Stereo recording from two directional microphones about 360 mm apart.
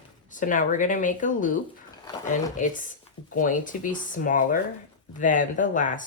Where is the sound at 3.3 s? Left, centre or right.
Left.